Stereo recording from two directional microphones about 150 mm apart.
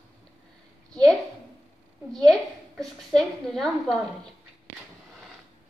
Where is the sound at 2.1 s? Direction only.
Centre (ahead or behind).